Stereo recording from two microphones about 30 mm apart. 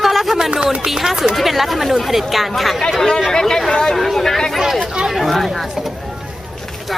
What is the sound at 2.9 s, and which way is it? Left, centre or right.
Chatter, centre.